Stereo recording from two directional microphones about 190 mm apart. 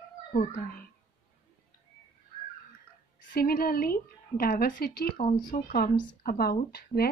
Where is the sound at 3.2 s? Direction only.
50° left (ahead or behind).